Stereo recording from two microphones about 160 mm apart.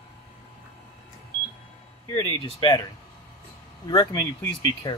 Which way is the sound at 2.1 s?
35° left (ahead or behind).